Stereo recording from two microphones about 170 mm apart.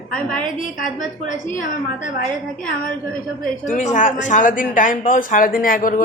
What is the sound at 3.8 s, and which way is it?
Speech, 45° left (ahead or behind).